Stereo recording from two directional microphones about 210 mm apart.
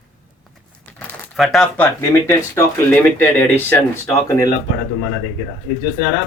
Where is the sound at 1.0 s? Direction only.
5° left (ahead or behind).